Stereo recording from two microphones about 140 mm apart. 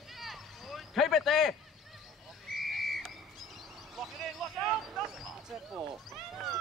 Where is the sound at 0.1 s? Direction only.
Centre (ahead or behind).